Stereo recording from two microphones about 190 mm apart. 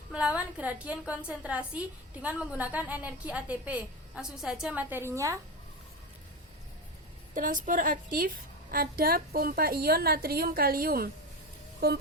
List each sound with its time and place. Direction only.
0.1 s a woman's voice: 5° right (ahead or behind)
7.3 s a woman's voice: 45° right (ahead or behind)
11.8 s music: 55° right (ahead or behind)